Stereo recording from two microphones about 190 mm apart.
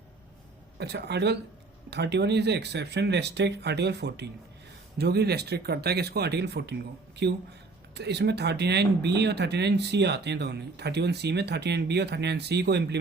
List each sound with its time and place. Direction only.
0.8 s speech: 60° right (ahead or behind)